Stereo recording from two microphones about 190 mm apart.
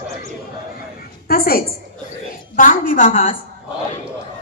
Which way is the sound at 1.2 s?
50° left (ahead or behind).